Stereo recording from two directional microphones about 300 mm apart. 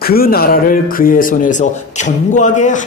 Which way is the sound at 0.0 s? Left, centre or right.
Left.